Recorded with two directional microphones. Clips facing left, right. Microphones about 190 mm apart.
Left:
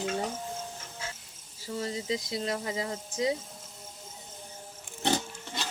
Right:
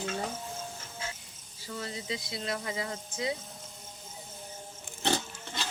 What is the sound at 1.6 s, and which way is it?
Speech, 35° left (ahead or behind).